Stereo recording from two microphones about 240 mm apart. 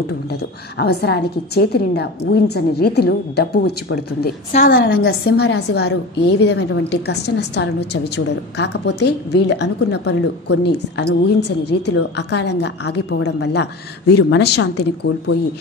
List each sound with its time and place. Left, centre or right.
0.3 s a woman's voice: left